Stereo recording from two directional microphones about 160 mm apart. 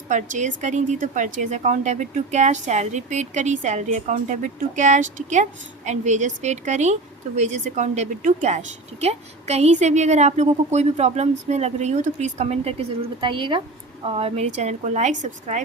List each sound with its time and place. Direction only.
0.1 s a woman's voice: 50° right (ahead or behind)
13.2 s a woman's voice: 30° right (ahead or behind); by 15.6 s 50° right (ahead or behind)